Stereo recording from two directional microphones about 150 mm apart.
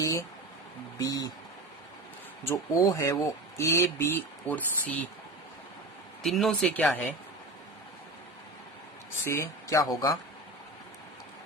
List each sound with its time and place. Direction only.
0.0 s a sound: 20° left (ahead or behind)
0.9 s speech: 25° left (ahead or behind)
2.4 s speech: 20° left (ahead or behind)
6.2 s speech: centre (ahead or behind)
9.2 s speech: 20° left (ahead or behind)